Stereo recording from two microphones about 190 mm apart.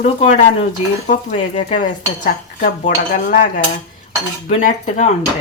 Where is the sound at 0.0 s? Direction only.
35° left (ahead or behind).